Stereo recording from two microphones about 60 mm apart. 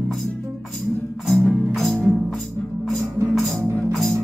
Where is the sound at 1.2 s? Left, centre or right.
Centre.